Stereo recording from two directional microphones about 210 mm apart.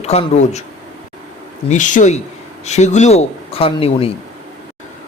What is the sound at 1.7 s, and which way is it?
Speech, 35° left (ahead or behind).